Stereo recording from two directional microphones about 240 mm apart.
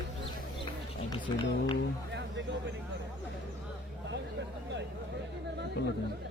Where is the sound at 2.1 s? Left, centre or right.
Right.